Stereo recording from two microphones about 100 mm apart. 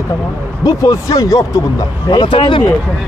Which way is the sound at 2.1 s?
55° left (ahead or behind).